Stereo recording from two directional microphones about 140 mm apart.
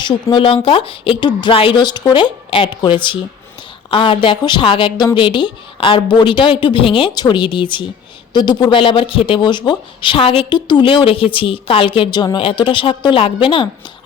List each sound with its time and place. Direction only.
0.0 s speech: 35° left (ahead or behind)